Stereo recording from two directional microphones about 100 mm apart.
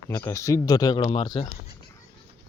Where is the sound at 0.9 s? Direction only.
60° left (ahead or behind).